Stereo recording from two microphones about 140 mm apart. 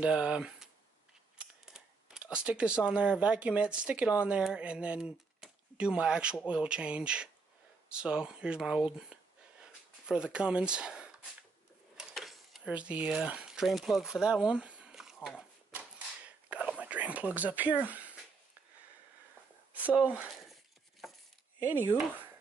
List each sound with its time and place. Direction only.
0.0 s speech: 5° right (ahead or behind)
12.0 s a sound: centre (ahead or behind)
16.4 s whispering: 10° right (ahead or behind)
17.8 s a sound: 10° right (ahead or behind)
20.0 s speech: 10° right (ahead or behind)
21.5 s speech: 15° right (ahead or behind)